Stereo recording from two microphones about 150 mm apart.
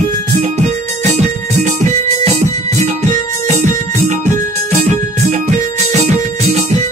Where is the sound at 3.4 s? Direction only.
50° right (ahead or behind).